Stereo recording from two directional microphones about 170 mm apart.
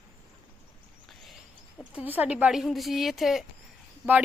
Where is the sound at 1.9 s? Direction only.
10° right (ahead or behind).